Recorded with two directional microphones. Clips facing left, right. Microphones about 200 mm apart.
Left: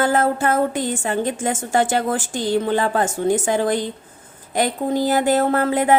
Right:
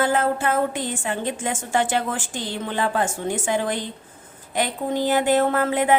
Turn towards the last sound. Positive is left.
turn(degrees=40)  # may be behind; listen again after turning